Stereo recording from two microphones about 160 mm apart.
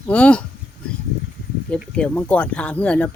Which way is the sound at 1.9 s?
10° left (ahead or behind).